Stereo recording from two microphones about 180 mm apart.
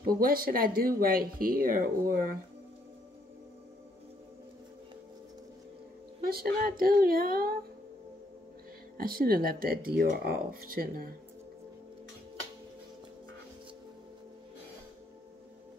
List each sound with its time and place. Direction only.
0.0 s speech: 55° right (ahead or behind)
6.2 s speech: 60° right (ahead or behind)
8.9 s speech: 55° right (ahead or behind)